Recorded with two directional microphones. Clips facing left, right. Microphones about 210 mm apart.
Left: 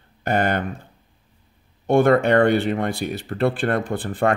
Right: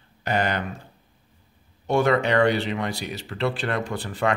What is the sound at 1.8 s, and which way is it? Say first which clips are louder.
Speech: left 5 dB; 55° left (ahead or behind).